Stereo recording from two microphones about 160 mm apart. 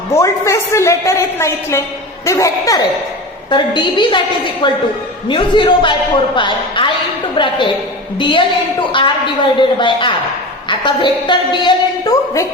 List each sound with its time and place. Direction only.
0.1 s a woman's voice: 15° left (ahead or behind)